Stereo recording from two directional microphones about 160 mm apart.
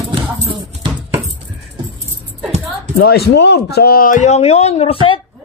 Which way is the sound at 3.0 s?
85° left.